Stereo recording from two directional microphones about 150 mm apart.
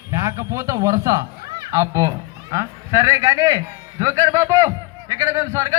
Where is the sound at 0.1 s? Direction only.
20° right (ahead or behind).